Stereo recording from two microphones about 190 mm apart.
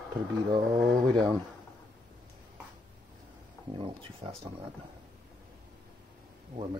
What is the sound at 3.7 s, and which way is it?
Speech, 25° right (ahead or behind).